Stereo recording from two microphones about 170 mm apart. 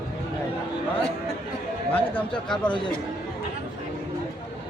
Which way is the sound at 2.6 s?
30° left (ahead or behind).